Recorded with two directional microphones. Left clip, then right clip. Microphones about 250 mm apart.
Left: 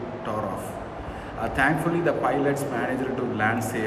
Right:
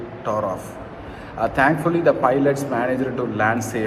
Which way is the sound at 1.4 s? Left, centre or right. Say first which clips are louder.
Right 5 dB; centre.